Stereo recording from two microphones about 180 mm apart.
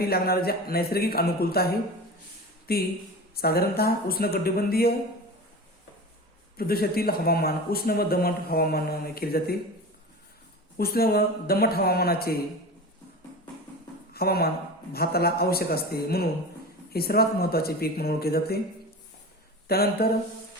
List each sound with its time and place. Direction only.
0.0 s speech: 55° left (ahead or behind)
2.7 s speech: 60° left (ahead or behind)
6.6 s speech: 55° left (ahead or behind)
10.8 s speech: 55° left (ahead or behind)
14.1 s speech: 60° left (ahead or behind)
19.6 s speech: 60° left (ahead or behind)